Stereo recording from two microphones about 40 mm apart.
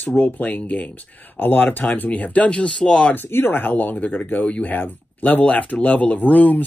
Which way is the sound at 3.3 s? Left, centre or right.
Left.